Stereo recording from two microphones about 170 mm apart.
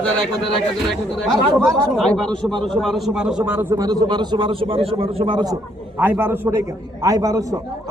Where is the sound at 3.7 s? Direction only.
20° right (ahead or behind).